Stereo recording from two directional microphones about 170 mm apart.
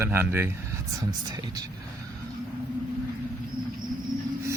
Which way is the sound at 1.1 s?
25° right (ahead or behind).